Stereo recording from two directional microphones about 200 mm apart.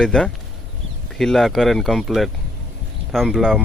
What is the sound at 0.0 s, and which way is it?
Speech, 5° left (ahead or behind).